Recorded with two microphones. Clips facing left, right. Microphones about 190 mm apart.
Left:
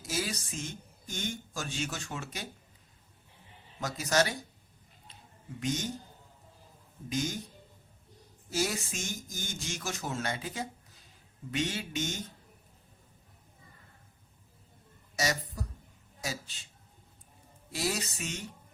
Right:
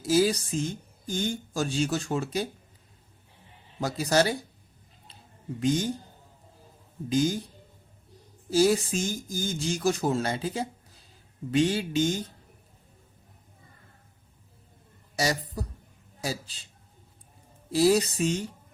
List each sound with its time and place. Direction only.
0.0 s speech: 35° right (ahead or behind)
3.8 s speech: 30° right (ahead or behind)
5.5 s speech: 30° right (ahead or behind)
7.1 s speech: 30° right (ahead or behind)
8.4 s speech: 30° right (ahead or behind)
15.1 s speech: 35° right (ahead or behind)
17.7 s speech: 35° right (ahead or behind)